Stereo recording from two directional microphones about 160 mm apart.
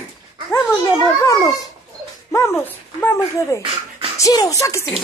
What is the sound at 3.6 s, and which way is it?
Beatboxing, 35° right (ahead or behind).